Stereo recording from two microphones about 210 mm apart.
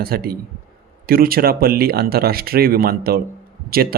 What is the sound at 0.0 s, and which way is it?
Speech, 45° right (ahead or behind).